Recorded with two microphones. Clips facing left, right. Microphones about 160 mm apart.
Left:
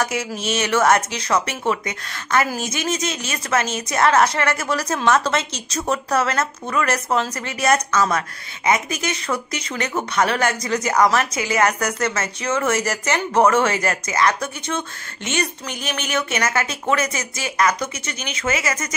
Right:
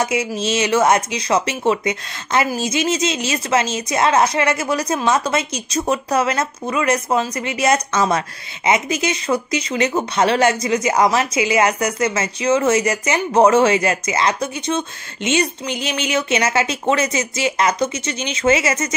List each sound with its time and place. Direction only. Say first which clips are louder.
0.0 s a woman's voice: right 4 dB; 20° right (ahead or behind)